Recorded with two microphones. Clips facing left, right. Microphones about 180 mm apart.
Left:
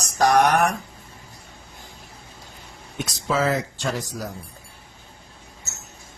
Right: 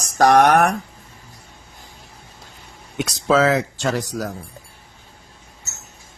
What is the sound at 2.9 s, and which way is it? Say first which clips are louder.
Speech: right 7 dB; 80° right.